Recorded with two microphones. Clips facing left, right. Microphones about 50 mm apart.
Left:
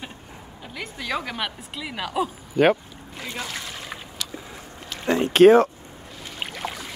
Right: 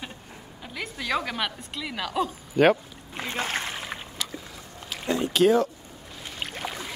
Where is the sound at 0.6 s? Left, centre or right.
Centre.